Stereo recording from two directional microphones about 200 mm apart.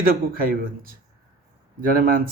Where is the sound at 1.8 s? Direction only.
45° right (ahead or behind).